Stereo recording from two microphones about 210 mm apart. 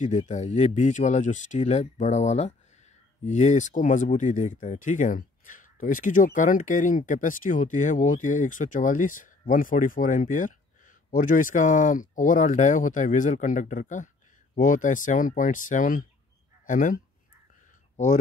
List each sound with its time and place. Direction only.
0.0 s speech: 35° left (ahead or behind)